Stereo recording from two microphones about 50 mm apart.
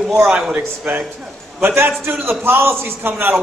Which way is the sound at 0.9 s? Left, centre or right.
Right.